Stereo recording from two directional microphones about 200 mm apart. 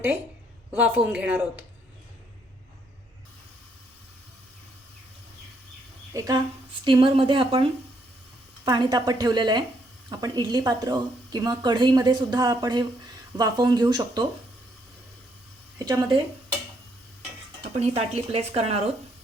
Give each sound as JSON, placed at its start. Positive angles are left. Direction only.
{"t": 0.7, "sound": "a woman's voice", "side_deg": -10}
{"t": 6.1, "sound": "a woman's voice", "side_deg": -20}
{"t": 15.8, "sound": "a woman's voice", "side_deg": -20}
{"t": 17.6, "sound": "speech", "side_deg": -30}